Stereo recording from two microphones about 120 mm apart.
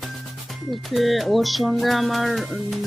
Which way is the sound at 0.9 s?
Centre (ahead or behind).